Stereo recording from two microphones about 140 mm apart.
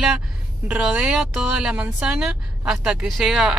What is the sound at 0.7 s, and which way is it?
Speech, 10° right (ahead or behind).